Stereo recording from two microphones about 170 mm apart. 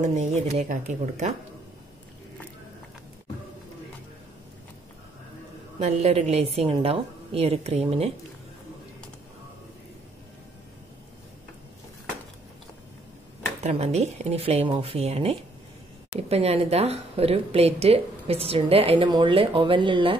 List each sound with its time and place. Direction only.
0.0 s speech: 45° right (ahead or behind)
5.8 s speech: 40° right (ahead or behind)
13.6 s speech: 40° right (ahead or behind)